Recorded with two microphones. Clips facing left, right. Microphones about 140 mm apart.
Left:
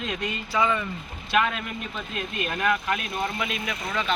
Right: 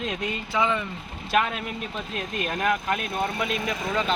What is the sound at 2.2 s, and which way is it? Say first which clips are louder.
Speech: right 1 dB; 40° right (ahead or behind).